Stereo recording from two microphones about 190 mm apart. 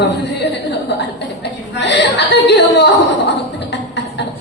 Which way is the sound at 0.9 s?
60° left (ahead or behind).